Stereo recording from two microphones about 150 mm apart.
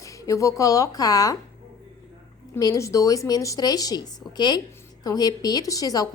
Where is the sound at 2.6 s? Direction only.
20° left (ahead or behind).